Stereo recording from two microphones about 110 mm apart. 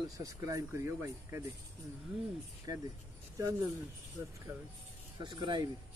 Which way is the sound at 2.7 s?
35° right (ahead or behind).